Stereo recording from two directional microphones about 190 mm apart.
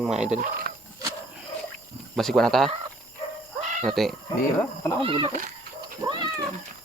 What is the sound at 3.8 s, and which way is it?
Speech, centre (ahead or behind).